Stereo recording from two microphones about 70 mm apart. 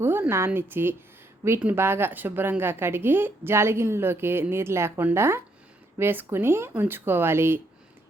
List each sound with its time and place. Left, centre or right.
0.0 s a woman's voice: right